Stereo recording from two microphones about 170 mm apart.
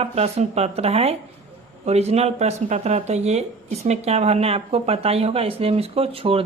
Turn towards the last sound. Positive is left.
turn(degrees=-35)  # may be behind; listen again after turning